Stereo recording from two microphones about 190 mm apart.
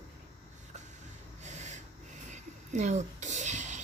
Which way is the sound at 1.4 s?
40° right (ahead or behind).